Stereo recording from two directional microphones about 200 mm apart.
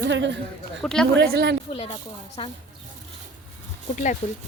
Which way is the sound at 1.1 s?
50° right (ahead or behind).